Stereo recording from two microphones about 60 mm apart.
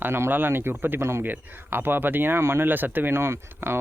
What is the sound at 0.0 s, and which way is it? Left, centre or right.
Speech, right.